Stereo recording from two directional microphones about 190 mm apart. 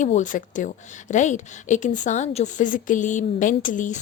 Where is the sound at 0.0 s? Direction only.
40° left (ahead or behind).